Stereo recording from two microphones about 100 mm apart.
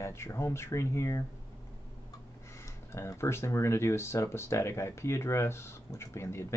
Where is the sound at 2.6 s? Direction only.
30° left (ahead or behind).